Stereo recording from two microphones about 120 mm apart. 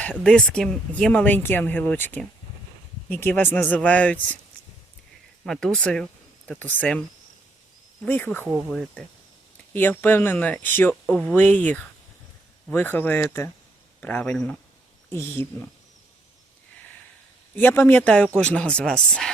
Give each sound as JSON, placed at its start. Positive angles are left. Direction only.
{"t": 0.0, "sound": "speech", "side_deg": 10}
{"t": 5.5, "sound": "speech", "side_deg": 5}
{"t": 8.0, "sound": "speech", "side_deg": 15}
{"t": 8.7, "sound": "speech", "side_deg": 5}
{"t": 9.7, "sound": "speech", "side_deg": 15}
{"t": 11.0, "sound": "speech", "side_deg": 5}
{"t": 15.1, "sound": "speech", "side_deg": 20}
{"t": 17.5, "sound": "speech", "side_deg": 15}